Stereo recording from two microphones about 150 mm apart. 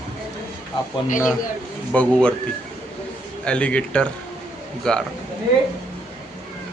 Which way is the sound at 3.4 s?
5° left (ahead or behind).